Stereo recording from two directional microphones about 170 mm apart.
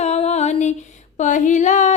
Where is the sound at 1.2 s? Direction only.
45° left (ahead or behind).